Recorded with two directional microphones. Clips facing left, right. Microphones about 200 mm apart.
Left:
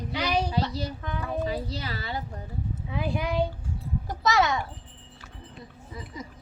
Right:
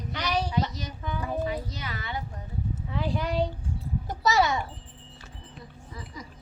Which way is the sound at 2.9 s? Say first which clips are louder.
Left 1 dB; 15° left (ahead or behind).